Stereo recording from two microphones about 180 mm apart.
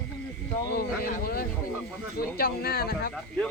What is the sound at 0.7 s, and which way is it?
Speech, 55° left (ahead or behind).